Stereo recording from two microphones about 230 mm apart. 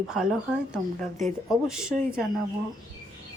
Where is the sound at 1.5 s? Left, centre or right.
Centre.